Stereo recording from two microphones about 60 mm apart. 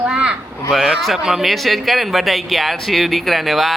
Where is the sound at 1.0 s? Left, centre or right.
Centre.